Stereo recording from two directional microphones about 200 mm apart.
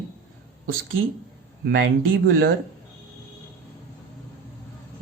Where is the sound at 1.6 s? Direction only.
75° right (ahead or behind).